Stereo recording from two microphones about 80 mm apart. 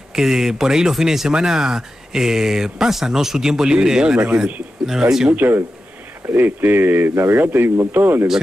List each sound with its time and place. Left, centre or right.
0.1 s speech: centre
5.3 s speech: right